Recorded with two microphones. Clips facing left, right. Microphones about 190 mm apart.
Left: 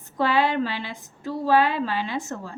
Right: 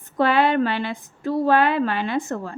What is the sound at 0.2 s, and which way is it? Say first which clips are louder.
Speech: right 4 dB; 55° right (ahead or behind).